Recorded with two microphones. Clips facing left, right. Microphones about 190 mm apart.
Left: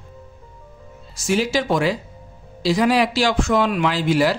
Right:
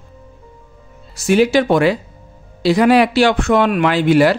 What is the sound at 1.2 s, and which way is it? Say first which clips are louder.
A man's voice: right 7 dB; 60° right (ahead or behind).